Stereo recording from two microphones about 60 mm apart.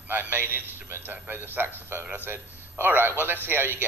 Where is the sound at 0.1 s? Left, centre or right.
Right.